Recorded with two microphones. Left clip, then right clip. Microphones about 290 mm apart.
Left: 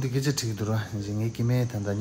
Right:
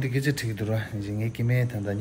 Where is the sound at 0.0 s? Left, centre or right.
Centre.